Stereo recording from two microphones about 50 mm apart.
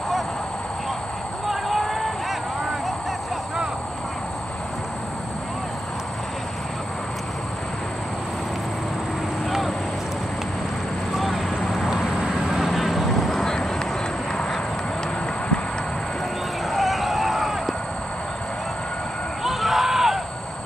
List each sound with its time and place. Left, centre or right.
1.5 s vehicle: centre
11.1 s vehicle: centre
12.5 s vehicle: centre
13.4 s vehicle: centre
16.7 s a sound: centre
19.4 s a sound: centre